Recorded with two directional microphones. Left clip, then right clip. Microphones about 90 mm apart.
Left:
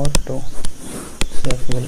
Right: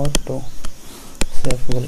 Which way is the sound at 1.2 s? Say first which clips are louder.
Right 1 dB; centre (ahead or behind).